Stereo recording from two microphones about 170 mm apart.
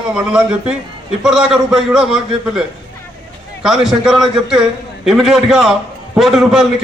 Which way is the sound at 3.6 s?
Centre (ahead or behind).